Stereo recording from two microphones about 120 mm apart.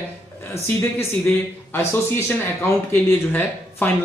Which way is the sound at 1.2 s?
20° left (ahead or behind).